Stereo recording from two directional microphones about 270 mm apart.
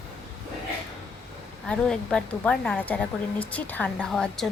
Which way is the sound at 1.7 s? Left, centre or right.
Centre.